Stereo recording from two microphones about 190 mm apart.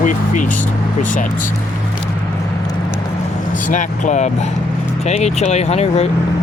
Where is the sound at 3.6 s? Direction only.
40° left (ahead or behind).